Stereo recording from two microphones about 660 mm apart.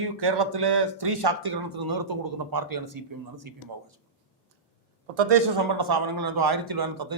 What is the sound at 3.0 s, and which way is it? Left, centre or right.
Speech, right.